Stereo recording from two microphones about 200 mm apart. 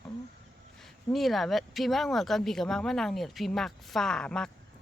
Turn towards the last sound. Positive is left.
turn(degrees=5)  # may be behind; listen again after turning